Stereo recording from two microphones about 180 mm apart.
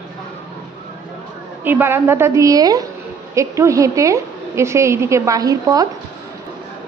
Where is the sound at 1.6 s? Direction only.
10° right (ahead or behind).